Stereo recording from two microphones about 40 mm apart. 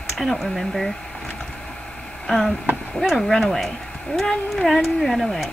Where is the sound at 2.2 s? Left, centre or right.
Centre.